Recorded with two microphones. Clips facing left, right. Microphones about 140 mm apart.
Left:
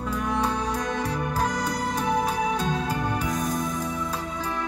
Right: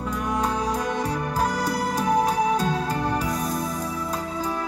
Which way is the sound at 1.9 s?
35° right (ahead or behind).